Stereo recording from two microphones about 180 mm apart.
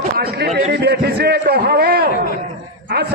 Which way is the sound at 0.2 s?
55° right (ahead or behind).